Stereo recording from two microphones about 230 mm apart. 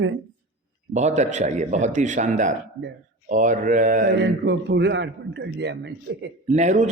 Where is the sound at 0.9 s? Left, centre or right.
Right.